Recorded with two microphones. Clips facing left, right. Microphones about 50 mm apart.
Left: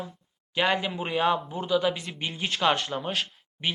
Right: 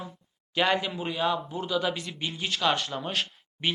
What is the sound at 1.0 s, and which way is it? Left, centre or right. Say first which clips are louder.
Speech: left 3 dB; left.